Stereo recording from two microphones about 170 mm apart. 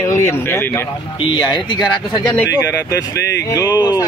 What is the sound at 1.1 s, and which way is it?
Speech, 30° left (ahead or behind).